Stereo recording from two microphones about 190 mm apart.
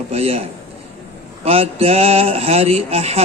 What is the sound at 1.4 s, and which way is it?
A man's voice, 30° right (ahead or behind).